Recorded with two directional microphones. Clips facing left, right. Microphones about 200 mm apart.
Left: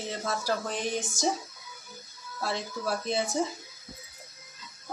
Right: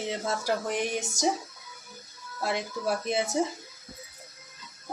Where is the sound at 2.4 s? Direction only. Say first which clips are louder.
Right 2 dB; 15° right (ahead or behind).